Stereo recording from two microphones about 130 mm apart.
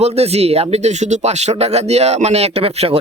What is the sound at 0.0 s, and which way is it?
A man's voice, 55° right (ahead or behind).